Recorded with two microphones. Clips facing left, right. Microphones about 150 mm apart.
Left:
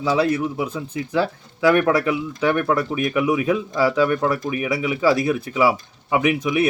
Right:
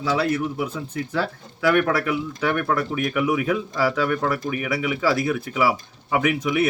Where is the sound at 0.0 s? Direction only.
15° left (ahead or behind).